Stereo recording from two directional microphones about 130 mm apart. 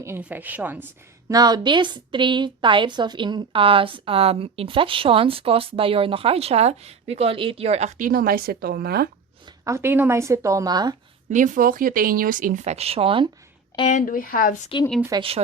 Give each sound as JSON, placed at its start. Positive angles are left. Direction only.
{"t": 0.2, "sound": "a woman's voice", "side_deg": -10}
{"t": 1.3, "sound": "a woman's voice", "side_deg": -30}
{"t": 9.6, "sound": "a woman's voice", "side_deg": -20}
{"t": 11.3, "sound": "speech", "side_deg": -75}
{"t": 13.8, "sound": "a woman's voice", "side_deg": 75}
{"t": 14.7, "sound": "speech", "side_deg": 40}
{"t": 15.1, "sound": "a woman's voice", "side_deg": -30}